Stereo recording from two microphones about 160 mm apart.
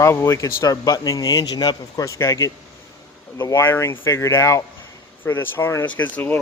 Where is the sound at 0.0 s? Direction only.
15° left (ahead or behind).